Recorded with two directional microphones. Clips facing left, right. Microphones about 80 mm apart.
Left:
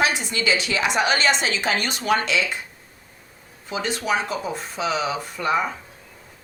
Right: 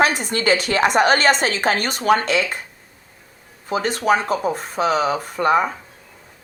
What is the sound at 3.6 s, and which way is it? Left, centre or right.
A woman's voice, right.